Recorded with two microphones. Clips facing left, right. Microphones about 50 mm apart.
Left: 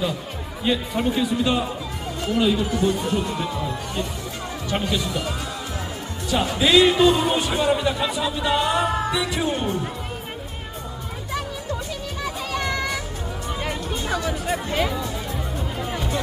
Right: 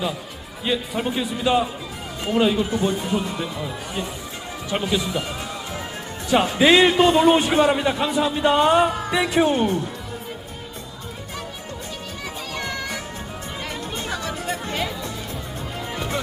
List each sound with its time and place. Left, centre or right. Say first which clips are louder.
0.6 s speech: left 1 dB; centre
2.2 s speech: right 1 dB; right
3.2 s speech: left 2 dB; centre
6.4 s music: right 1 dB; right
7.8 s music: right 2 dB; right
14.0 s music: left 3 dB; left
14.5 s music: left 4 dB; centre